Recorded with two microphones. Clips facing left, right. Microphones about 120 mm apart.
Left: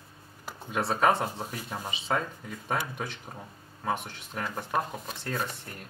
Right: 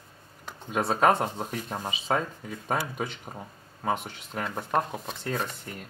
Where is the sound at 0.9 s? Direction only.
25° right (ahead or behind).